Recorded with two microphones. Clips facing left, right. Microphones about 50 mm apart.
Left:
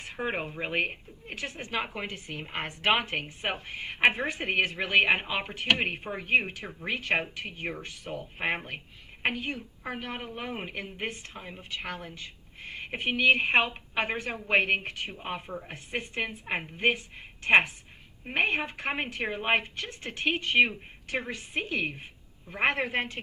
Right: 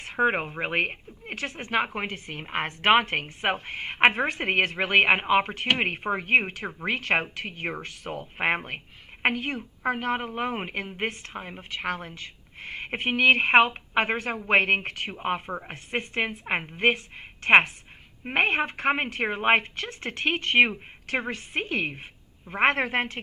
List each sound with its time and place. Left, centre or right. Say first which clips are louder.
0.0 s a woman's voice: right 8 dB; right
8.1 s a woman's voice: right 5 dB; right
9.2 s a woman's voice: right 5 dB; right
15.1 s a woman's voice: right 7 dB; right